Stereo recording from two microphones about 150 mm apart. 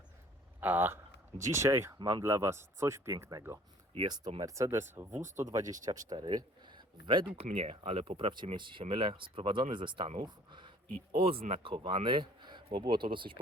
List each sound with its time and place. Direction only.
0.6 s speech: 10° right (ahead or behind)
2.0 s speech: 30° right (ahead or behind)
2.2 s speech: 15° right (ahead or behind)
4.4 s speech: 20° right (ahead or behind)
7.3 s speech: 40° right (ahead or behind)
10.2 s a sound: 30° right (ahead or behind)
11.4 s speech: 40° right (ahead or behind)